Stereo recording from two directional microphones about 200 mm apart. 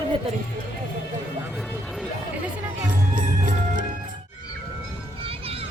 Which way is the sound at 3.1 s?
40° right (ahead or behind).